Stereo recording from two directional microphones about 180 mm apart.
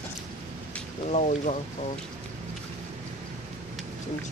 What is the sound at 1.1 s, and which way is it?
Speech, 40° left (ahead or behind).